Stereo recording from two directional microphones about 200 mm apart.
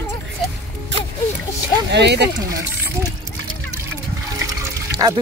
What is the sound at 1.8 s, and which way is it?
Speech, 60° right (ahead or behind).